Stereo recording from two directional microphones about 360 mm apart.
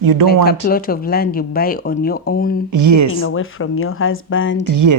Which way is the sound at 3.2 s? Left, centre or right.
Left.